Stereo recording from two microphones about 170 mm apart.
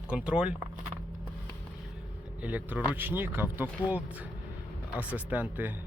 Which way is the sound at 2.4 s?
10° right (ahead or behind).